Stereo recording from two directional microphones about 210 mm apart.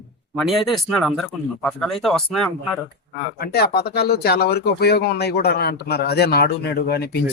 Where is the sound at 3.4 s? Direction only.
50° left (ahead or behind).